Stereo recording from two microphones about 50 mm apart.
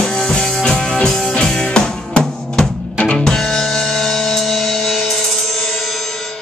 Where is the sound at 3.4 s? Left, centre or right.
Centre.